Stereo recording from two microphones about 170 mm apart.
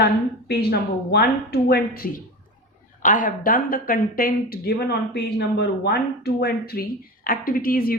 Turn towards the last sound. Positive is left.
turn(degrees=60)  # may be behind; listen again after turning